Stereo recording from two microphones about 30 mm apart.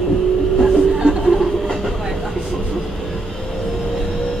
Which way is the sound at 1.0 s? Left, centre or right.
Centre.